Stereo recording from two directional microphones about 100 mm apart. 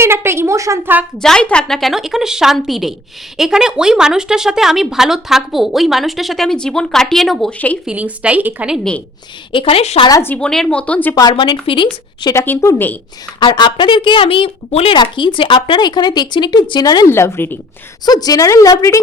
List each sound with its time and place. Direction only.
0.0 s a woman's voice: 25° right (ahead or behind)
1.2 s a woman's voice: 10° left (ahead or behind)
7.9 s a woman's voice: 15° right (ahead or behind)
9.5 s a woman's voice: 65° left (ahead or behind); by 10.0 s 85° left
10.4 s speech: 5° left (ahead or behind)
11.1 s speech: 45° left (ahead or behind)
11.6 s speech: 60° left (ahead or behind)
12.3 s speech: 30° left (ahead or behind)
13.4 s speech: 50° left (ahead or behind); by 14.9 s 75° left (ahead or behind)
14.9 s speech: 55° left (ahead or behind)
17.1 s speech: 25° left (ahead or behind)
18.0 s a woman's voice: 40° left (ahead or behind)